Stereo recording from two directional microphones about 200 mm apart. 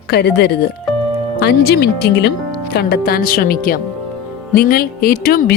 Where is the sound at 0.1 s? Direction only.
55° left (ahead or behind).